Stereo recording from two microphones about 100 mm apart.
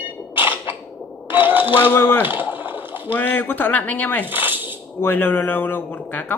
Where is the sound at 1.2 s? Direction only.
20° right (ahead or behind).